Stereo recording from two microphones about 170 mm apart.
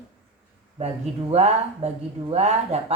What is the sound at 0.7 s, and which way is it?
Speech, 40° right (ahead or behind).